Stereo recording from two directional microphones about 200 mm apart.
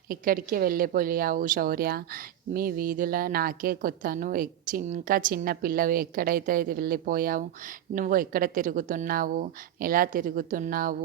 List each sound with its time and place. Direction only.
0.1 s a woman's voice: 45° right (ahead or behind)